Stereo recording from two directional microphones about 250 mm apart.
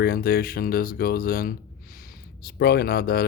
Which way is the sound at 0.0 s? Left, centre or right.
Left.